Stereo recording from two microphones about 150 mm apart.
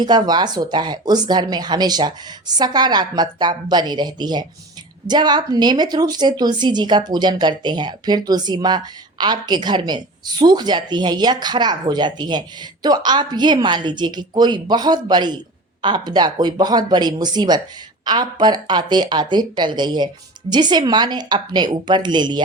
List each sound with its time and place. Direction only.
0.0 s speech: 30° right (ahead or behind)